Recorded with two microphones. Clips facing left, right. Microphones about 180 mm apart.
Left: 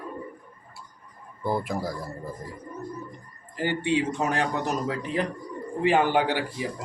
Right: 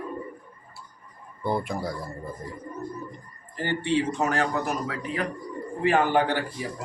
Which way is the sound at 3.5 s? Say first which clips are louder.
Even; 10° left (ahead or behind).